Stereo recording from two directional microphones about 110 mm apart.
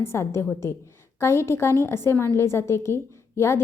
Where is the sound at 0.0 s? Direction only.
25° left (ahead or behind).